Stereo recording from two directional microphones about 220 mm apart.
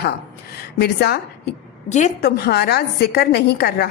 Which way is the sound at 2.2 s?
45° left (ahead or behind).